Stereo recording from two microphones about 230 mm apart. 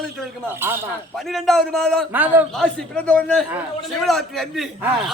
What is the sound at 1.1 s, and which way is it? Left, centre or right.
A man's voice, centre.